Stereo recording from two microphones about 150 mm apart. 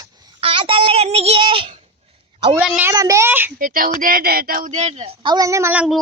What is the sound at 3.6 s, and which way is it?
Speech, 65° right (ahead or behind).